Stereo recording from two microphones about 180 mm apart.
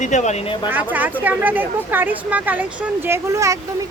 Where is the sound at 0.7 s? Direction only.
10° right (ahead or behind).